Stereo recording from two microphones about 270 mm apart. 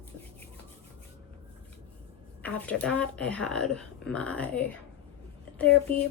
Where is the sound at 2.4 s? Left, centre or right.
Centre.